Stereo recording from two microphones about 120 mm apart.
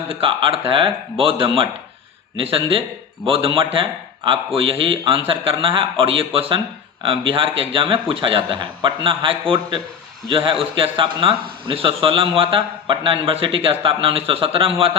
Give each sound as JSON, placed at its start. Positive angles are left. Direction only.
{"t": 0.1, "sound": "a man's voice", "side_deg": -45}